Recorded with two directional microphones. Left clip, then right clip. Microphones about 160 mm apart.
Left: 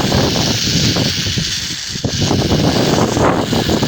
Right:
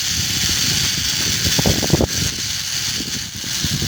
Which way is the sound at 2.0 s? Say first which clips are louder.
Left 3 dB; 50° right (ahead or behind).